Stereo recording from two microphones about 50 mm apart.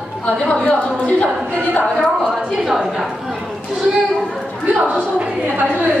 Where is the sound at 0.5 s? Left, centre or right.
Left.